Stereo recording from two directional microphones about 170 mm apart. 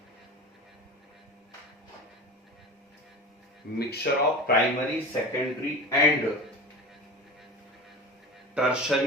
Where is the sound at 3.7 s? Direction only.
70° left (ahead or behind).